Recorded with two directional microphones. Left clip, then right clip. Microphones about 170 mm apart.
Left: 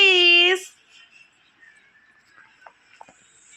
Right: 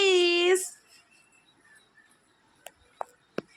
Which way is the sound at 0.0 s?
20° right (ahead or behind).